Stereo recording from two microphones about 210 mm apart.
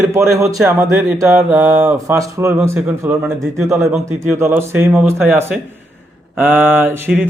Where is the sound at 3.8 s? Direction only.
Centre (ahead or behind).